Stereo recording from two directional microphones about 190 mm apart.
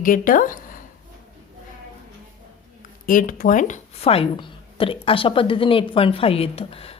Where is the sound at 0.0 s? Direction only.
45° left (ahead or behind).